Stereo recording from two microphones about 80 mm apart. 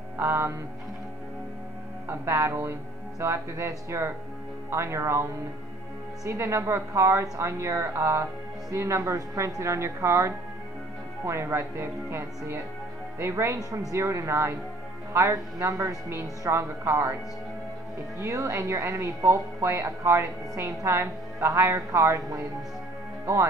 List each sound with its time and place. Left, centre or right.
0.2 s a woman's voice: right
2.0 s a woman's voice: right
18.2 s a woman's voice: right